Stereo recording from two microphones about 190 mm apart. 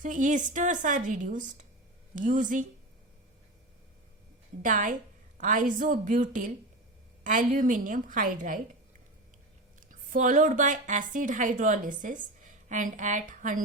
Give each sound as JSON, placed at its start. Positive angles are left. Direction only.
{"t": 0.0, "sound": "a woman's voice", "side_deg": -40}
{"t": 4.6, "sound": "a woman's voice", "side_deg": -45}
{"t": 9.9, "sound": "a woman's voice", "side_deg": -45}